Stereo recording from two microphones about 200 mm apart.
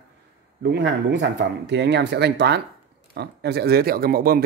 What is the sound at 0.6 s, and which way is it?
Speech, 60° right (ahead or behind).